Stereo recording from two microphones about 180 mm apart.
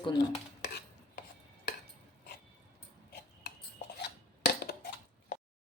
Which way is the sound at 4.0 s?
65° left (ahead or behind).